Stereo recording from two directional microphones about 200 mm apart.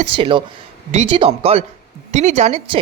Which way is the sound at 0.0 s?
25° right (ahead or behind).